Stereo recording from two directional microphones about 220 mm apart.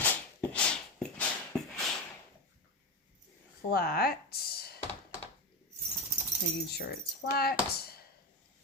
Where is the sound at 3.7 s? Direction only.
45° left (ahead or behind).